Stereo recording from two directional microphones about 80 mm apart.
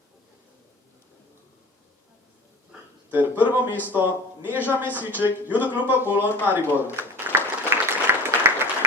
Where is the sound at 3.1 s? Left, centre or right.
Right.